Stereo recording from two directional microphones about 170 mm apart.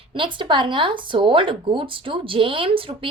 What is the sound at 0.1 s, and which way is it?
A woman's voice, 30° right (ahead or behind).